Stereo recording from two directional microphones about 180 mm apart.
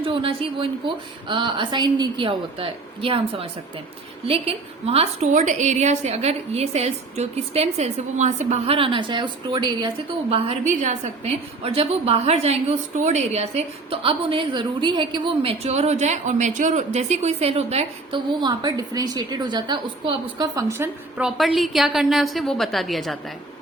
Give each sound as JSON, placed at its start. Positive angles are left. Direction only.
{"t": 0.0, "sound": "a woman's voice", "side_deg": -30}